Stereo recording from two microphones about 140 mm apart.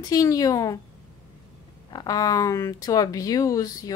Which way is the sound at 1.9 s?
30° left (ahead or behind).